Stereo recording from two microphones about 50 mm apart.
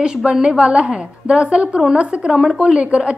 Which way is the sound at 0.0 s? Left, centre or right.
Centre.